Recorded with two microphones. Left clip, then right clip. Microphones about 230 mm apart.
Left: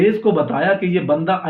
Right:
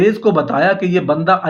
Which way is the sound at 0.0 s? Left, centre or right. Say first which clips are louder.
Right 2 dB; right.